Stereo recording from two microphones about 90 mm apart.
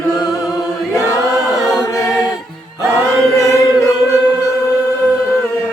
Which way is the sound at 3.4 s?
35° left (ahead or behind).